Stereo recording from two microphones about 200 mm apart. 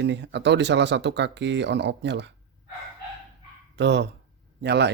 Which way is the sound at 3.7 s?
60° right (ahead or behind).